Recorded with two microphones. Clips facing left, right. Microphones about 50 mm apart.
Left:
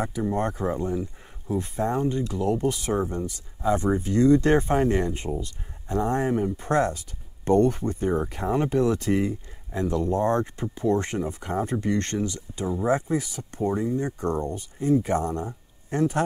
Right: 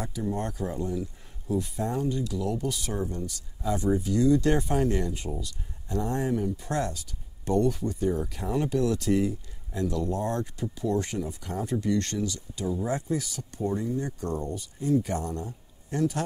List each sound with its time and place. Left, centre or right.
0.0 s speech: left